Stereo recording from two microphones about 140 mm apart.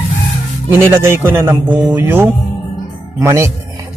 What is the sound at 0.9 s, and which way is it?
A man's voice, 20° right (ahead or behind).